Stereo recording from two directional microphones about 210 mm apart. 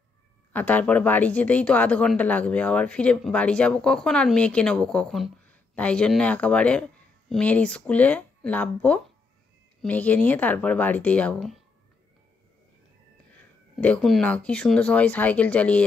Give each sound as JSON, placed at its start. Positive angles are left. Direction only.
{"t": 0.5, "sound": "speech", "side_deg": 10}
{"t": 13.7, "sound": "speech", "side_deg": 5}